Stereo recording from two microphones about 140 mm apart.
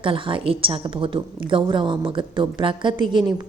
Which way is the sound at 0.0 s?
35° right (ahead or behind).